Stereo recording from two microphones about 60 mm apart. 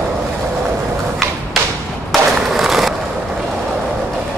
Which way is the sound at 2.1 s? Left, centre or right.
Centre.